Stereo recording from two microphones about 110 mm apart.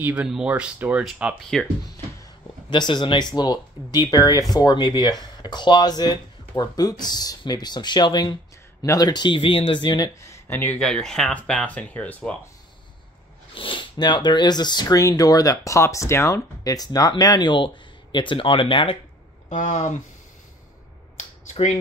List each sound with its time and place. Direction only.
0.0 s speech: 10° right (ahead or behind)
1.0 s speech: centre (ahead or behind)
2.7 s speech: 45° left (ahead or behind)
10.2 s speech: 25° left (ahead or behind)
10.8 s speech: 5° left (ahead or behind)
13.6 s speech: 50° left (ahead or behind)
19.7 s speech: 90° left
21.2 s a sound: 90° left